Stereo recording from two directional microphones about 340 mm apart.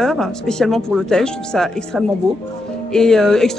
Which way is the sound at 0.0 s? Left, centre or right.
Centre.